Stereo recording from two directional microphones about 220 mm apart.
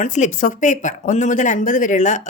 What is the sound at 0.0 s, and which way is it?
Speech, 35° left (ahead or behind).